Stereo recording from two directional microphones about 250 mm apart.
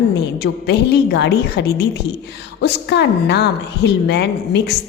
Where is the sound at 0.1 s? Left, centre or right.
Left.